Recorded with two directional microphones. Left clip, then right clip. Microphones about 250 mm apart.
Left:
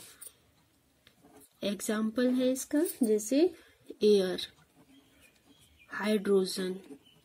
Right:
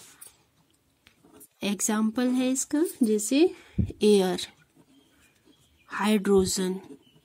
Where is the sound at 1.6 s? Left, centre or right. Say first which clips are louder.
Right 5 dB; right.